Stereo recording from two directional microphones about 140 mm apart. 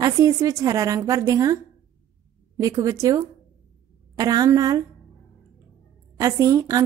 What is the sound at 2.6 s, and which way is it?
Speech, 25° right (ahead or behind).